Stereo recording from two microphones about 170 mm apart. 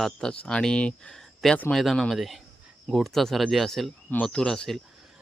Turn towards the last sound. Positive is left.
turn(degrees=5)  # may be behind; listen again after turning